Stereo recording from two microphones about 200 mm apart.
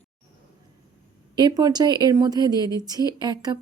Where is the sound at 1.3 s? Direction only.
20° right (ahead or behind).